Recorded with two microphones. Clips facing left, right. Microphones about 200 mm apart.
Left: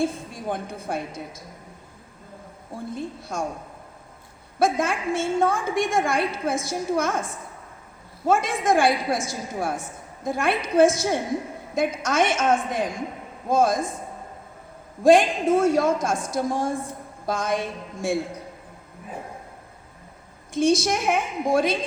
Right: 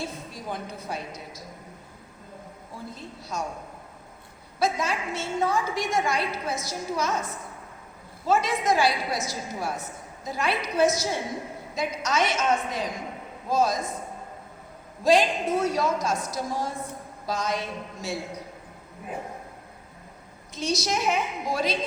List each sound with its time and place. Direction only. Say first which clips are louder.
0.0 s a woman's voice: left 8 dB; 55° left (ahead or behind)
2.7 s a woman's voice: left 8 dB; 50° left (ahead or behind)
4.6 s a woman's voice: left 4 dB; 50° left (ahead or behind)
8.3 s a woman's voice: left 3 dB; 50° left (ahead or behind)
15.0 s a woman's voice: left 5 dB; 50° left (ahead or behind)
20.5 s a woman's voice: left 7 dB; 50° left (ahead or behind)